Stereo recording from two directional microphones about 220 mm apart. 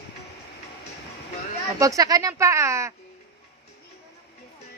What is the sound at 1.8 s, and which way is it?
Speech, 15° right (ahead or behind).